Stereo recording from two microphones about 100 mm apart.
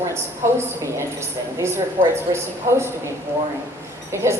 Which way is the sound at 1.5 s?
25° right (ahead or behind).